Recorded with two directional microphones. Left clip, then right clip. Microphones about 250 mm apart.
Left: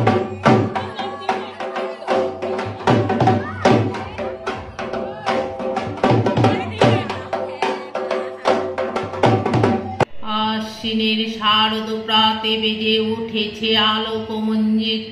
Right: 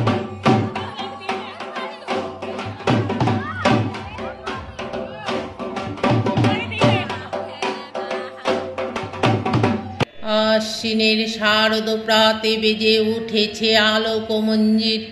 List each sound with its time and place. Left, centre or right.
0.0 s music: centre
8.1 s music: centre
10.2 s mantra: right